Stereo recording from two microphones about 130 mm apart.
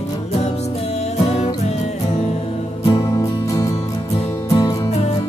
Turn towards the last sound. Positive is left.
turn(degrees=25)  # may be behind; listen again after turning